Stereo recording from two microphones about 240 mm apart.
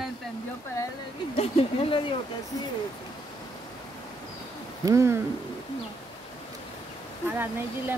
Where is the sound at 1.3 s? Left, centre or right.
Left.